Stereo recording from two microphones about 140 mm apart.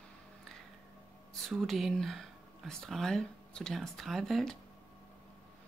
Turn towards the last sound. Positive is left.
turn(degrees=0)  # may be behind; listen again after turning